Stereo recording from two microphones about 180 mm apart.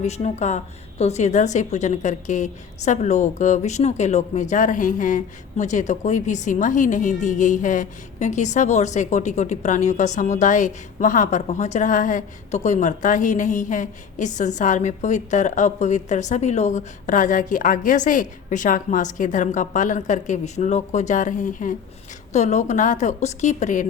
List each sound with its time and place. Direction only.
0.0 s a woman's voice: 40° left (ahead or behind)